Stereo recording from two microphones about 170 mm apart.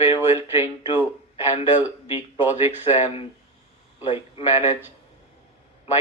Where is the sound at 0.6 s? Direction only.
30° left (ahead or behind).